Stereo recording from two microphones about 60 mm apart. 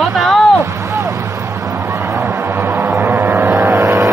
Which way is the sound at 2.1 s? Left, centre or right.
Right.